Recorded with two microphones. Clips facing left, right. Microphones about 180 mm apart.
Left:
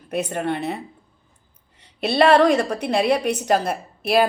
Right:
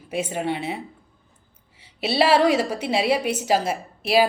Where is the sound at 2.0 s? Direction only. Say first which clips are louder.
Left 3 dB; 5° right (ahead or behind).